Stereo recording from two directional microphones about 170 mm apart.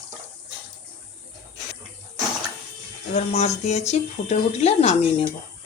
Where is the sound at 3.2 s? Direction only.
40° left (ahead or behind).